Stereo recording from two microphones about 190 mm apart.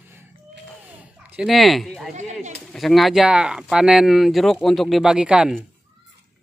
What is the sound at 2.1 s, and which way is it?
Speech, 40° right (ahead or behind).